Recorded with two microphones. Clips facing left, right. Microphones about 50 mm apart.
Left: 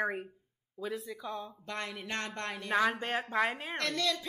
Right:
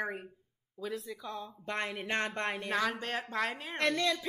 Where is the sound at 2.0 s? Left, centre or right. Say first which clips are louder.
Right 6 dB; right.